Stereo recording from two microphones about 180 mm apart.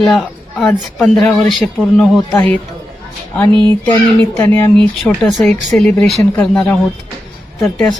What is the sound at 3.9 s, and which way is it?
Speech, 15° left (ahead or behind).